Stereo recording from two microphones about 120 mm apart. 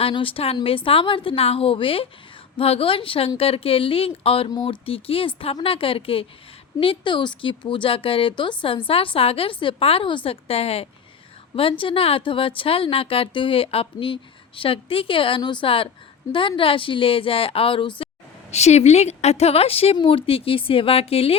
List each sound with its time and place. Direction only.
0.0 s a woman's voice: 45° left (ahead or behind)
18.5 s a woman's voice: 65° left (ahead or behind)